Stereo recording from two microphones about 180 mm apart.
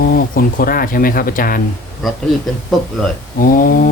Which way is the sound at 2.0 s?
Centre (ahead or behind).